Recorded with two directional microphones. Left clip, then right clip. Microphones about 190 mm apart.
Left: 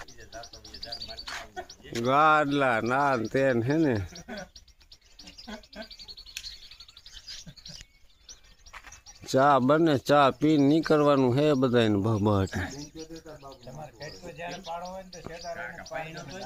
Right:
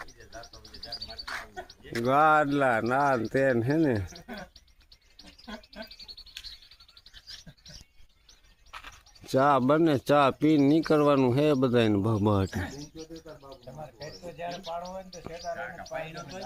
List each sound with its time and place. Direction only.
0.3 s bird: 45° left (ahead or behind)
1.2 s bird: 5° right (ahead or behind)
1.5 s a sound: 55° left (ahead or behind)
2.0 s speech: 5° right (ahead or behind)
4.1 s a sound: 50° left (ahead or behind)
5.2 s bird: 50° left (ahead or behind)
9.2 s speech: 10° left (ahead or behind)
12.5 s a man's voice: 25° left (ahead or behind)
15.5 s speech: centre (ahead or behind)